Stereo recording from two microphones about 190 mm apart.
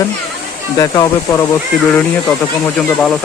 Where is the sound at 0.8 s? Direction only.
20° left (ahead or behind).